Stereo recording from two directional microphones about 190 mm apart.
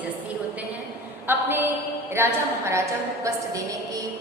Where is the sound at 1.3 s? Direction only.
10° right (ahead or behind).